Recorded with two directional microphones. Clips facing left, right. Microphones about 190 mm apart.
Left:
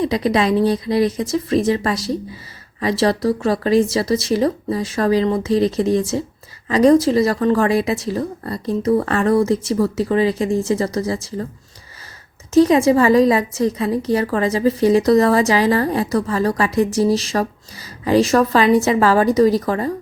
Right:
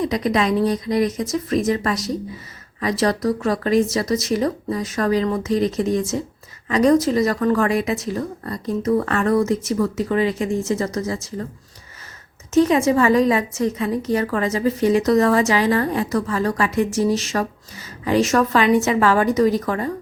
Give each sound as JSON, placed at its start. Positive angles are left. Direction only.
{"t": 0.0, "sound": "a woman's voice", "side_deg": 30}
{"t": 12.5, "sound": "a woman's voice", "side_deg": 35}